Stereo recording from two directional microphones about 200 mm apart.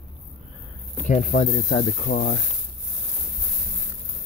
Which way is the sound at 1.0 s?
45° left (ahead or behind).